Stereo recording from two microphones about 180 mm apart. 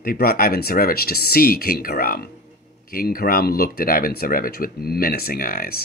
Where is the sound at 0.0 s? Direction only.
55° left (ahead or behind).